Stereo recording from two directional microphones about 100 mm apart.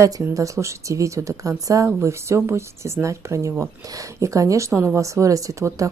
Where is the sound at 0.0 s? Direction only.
35° right (ahead or behind).